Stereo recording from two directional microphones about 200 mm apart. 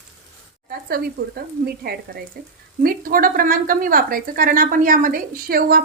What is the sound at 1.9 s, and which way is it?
A woman's voice, 50° right (ahead or behind).